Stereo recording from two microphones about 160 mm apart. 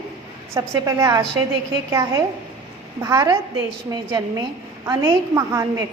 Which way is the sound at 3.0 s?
20° right (ahead or behind).